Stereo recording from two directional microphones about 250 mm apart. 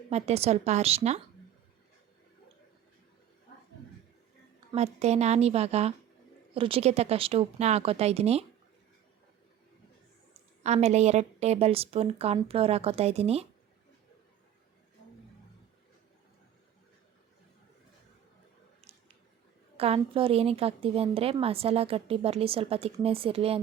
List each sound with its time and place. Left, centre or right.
0.1 s a woman's voice: right
4.7 s a woman's voice: right
10.6 s a woman's voice: right
18.8 s squish: right
19.7 s a woman's voice: right